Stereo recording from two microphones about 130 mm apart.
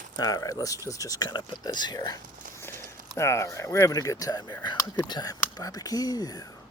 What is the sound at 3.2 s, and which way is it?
Speech, 20° left (ahead or behind).